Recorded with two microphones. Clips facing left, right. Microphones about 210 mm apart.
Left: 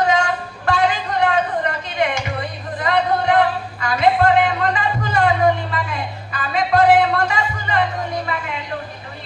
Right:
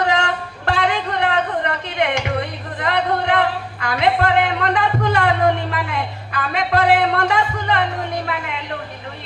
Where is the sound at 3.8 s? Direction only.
65° right (ahead or behind).